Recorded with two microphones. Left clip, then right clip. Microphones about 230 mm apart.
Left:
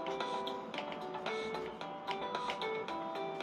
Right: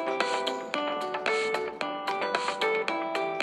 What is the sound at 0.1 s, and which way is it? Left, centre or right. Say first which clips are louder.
Music: right 10 dB; right.